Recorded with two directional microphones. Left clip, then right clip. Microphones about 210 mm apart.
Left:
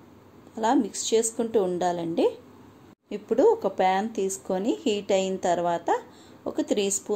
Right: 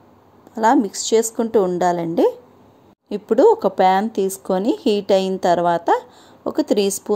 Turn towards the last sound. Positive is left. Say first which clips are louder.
# right 8 dB
turn(degrees=-35)  # may be behind; listen again after turning